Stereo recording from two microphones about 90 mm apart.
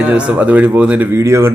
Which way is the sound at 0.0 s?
15° right (ahead or behind).